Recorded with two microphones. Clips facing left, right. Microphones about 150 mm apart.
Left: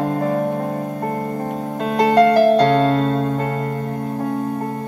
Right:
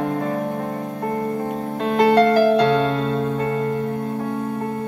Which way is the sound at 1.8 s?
40° left (ahead or behind).